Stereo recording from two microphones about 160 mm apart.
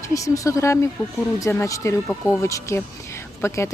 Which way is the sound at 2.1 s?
5° left (ahead or behind).